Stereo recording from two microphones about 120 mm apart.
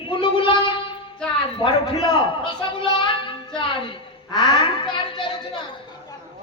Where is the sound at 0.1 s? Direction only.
45° left (ahead or behind).